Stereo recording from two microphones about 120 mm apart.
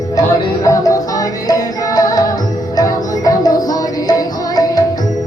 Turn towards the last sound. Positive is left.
turn(degrees=30)  # may be behind; listen again after turning